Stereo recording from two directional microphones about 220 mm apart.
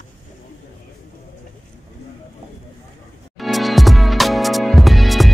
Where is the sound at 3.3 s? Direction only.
Centre (ahead or behind).